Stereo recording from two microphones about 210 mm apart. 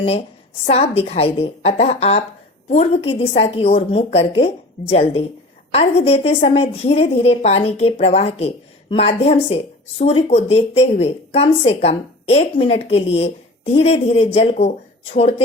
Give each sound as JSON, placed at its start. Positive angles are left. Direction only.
{"t": 0.6, "sound": "speech", "side_deg": 30}